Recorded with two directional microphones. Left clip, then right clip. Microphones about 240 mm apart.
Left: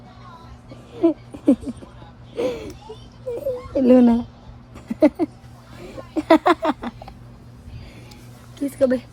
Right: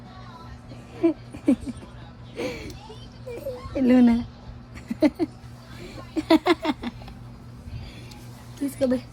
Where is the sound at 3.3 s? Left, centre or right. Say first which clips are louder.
Left 7 dB; left.